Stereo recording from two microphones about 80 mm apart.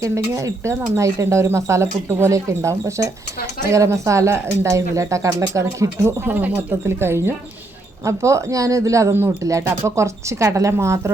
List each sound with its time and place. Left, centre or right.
0.0 s speech: right